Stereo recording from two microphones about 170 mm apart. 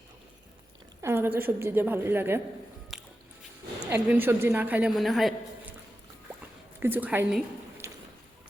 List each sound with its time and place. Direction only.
1.0 s a woman's voice: 15° right (ahead or behind)
2.9 s squish: centre (ahead or behind)
3.8 s a woman's voice: 10° right (ahead or behind)
6.7 s a woman's voice: 10° right (ahead or behind)
7.8 s a sound: 15° right (ahead or behind)